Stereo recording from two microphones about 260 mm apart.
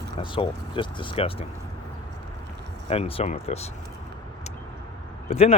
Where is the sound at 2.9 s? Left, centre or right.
Left.